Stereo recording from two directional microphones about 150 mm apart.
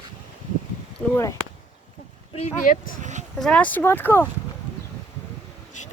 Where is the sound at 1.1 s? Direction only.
20° left (ahead or behind).